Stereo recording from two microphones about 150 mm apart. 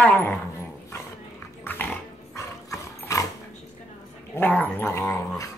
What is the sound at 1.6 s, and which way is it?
Dog, 15° left (ahead or behind).